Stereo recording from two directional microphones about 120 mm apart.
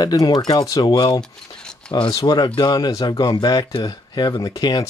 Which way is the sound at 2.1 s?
30° left (ahead or behind).